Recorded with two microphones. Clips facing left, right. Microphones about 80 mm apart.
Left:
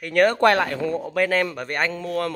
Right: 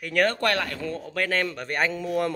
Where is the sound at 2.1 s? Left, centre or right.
Centre.